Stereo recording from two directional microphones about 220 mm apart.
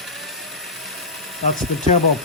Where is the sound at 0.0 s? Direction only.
Centre (ahead or behind).